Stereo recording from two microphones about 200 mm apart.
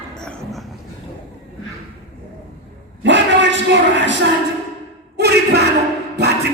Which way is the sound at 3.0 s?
65° right (ahead or behind).